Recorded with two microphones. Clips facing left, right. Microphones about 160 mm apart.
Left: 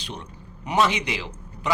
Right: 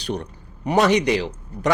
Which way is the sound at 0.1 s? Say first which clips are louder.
Right 11 dB; 40° right (ahead or behind).